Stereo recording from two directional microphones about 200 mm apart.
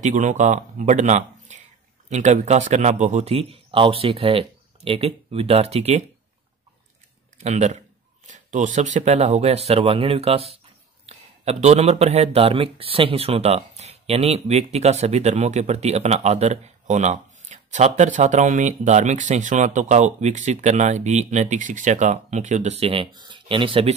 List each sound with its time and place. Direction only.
0.0 s speech: 40° right (ahead or behind)
7.4 s speech: 35° right (ahead or behind)